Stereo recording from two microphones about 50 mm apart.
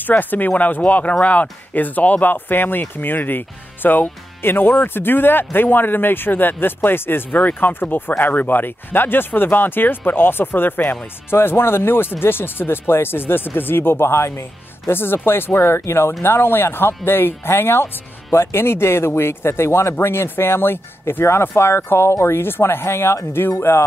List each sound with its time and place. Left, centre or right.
0.0 s speech: left
11.2 s speech: left
14.9 s speech: left